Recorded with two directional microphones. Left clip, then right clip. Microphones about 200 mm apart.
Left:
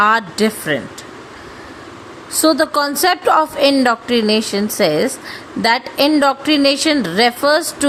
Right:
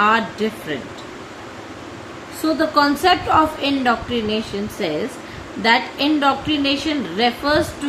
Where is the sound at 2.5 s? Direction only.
65° left (ahead or behind).